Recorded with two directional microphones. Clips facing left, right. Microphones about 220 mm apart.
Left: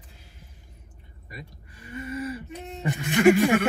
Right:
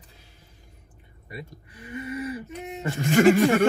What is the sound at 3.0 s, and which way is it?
Speech, 45° right (ahead or behind).